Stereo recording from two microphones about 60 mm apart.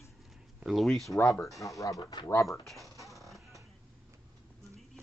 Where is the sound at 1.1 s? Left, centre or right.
Left.